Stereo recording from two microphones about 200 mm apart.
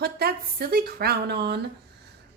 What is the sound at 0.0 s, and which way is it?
A woman's voice, 50° right (ahead or behind).